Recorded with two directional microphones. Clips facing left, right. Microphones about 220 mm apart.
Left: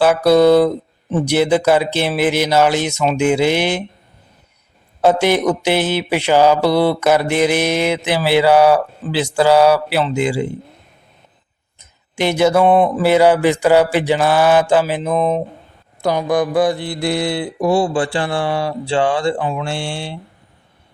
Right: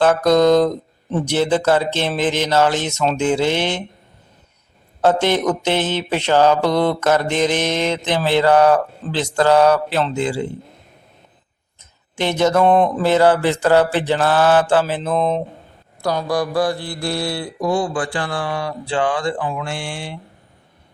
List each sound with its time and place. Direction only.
0.0 s mantra: 10° left (ahead or behind)
5.0 s mantra: 10° left (ahead or behind)
11.8 s mantra: 10° left (ahead or behind); by 20.1 s 25° left (ahead or behind)